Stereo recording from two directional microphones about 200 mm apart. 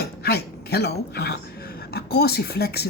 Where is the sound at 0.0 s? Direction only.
55° left (ahead or behind).